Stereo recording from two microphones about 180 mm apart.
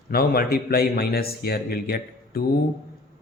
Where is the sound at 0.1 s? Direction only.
55° left (ahead or behind).